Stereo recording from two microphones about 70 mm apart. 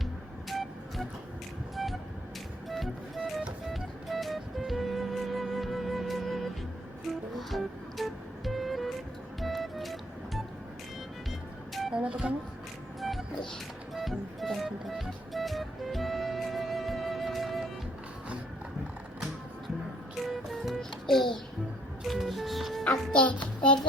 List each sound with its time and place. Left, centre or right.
0.0 s music: centre
1.7 s a sound: centre
2.6 s music: centre
11.9 s music: centre
13.0 s music: centre
20.2 s music: centre
23.1 s music: centre